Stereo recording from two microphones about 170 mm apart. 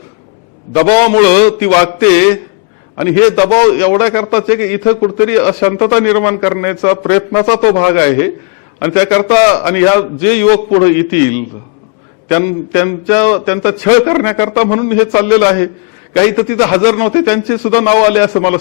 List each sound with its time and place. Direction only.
0.7 s speech: 15° left (ahead or behind)